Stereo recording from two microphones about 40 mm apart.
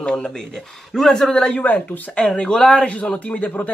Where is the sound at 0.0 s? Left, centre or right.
Left.